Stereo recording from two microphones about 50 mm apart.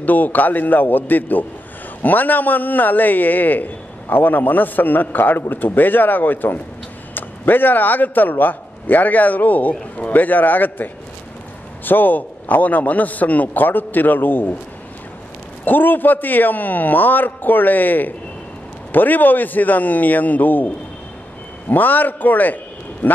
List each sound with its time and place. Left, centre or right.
0.0 s a man's voice: left
15.6 s a man's voice: left